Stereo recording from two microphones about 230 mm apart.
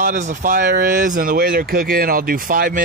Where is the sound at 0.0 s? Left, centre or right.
Right.